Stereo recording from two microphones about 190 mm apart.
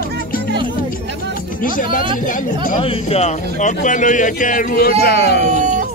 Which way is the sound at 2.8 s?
30° left (ahead or behind).